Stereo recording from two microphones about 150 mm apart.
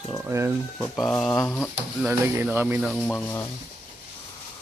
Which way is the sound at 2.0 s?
10° right (ahead or behind).